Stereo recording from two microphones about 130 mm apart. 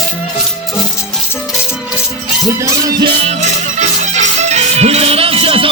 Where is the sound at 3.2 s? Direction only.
60° right (ahead or behind); by 5.7 s 45° right (ahead or behind).